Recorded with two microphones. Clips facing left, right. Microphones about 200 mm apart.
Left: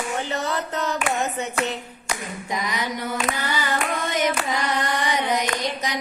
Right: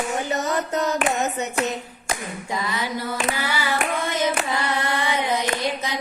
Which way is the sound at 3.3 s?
20° left (ahead or behind).